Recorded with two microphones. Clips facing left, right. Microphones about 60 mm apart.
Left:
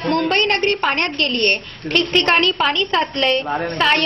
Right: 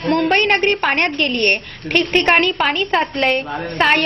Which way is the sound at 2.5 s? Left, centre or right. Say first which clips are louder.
Right 1 dB; right.